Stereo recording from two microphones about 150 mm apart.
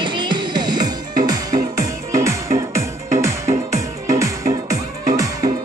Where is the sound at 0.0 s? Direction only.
30° right (ahead or behind).